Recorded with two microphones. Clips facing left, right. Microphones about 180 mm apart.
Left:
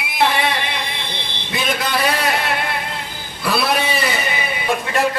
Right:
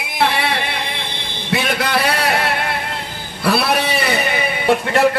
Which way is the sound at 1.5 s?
65° right (ahead or behind).